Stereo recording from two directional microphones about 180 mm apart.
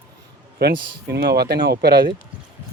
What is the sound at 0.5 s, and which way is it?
A man's voice, 60° right (ahead or behind).